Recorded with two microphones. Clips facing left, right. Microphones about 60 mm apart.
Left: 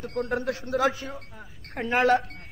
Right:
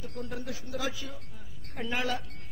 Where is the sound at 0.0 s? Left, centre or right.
Left.